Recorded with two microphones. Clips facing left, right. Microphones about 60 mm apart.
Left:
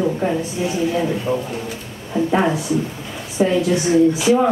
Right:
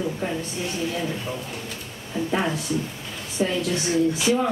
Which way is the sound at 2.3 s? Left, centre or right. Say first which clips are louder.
Left 6 dB; centre.